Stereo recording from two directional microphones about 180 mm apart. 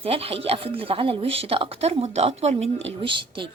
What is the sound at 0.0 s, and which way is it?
Speech, 30° right (ahead or behind).